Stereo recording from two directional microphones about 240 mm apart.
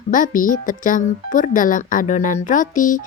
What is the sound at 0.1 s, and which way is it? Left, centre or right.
Speech, left.